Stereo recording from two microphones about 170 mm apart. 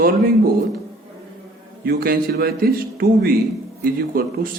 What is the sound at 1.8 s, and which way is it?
Speech, 60° right (ahead or behind).